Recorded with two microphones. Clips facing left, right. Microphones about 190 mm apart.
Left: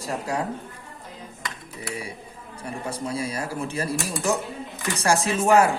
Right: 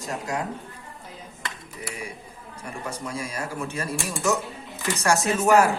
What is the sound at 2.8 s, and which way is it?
A woman's voice, 30° left (ahead or behind).